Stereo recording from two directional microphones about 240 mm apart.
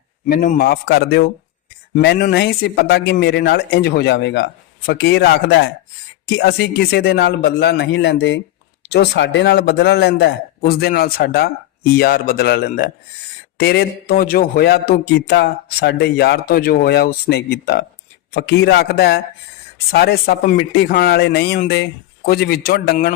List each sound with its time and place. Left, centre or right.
0.3 s a man's voice: left